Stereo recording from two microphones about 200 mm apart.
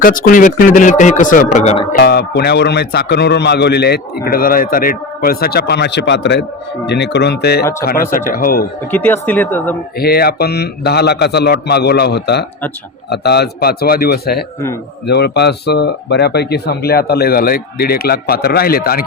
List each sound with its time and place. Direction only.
0.0 s speech: 45° left (ahead or behind)
2.0 s a man's voice: 55° left (ahead or behind)
8.1 s speech: 45° left (ahead or behind)
8.9 s speech: 10° left (ahead or behind)
10.0 s a man's voice: 50° left (ahead or behind)